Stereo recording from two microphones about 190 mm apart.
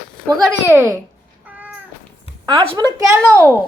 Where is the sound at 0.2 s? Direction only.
Centre (ahead or behind).